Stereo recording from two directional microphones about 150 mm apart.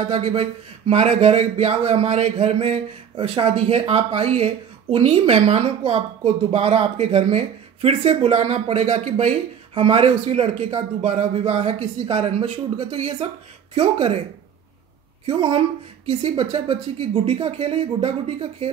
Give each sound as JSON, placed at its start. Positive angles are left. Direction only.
{"t": 0.1, "sound": "a woman's voice", "side_deg": -40}
{"t": 15.2, "sound": "speech", "side_deg": -35}